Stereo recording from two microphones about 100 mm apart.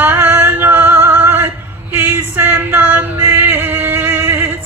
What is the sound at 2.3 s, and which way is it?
Music, 20° right (ahead or behind).